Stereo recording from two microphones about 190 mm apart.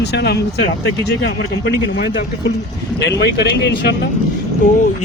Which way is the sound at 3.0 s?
60° left (ahead or behind).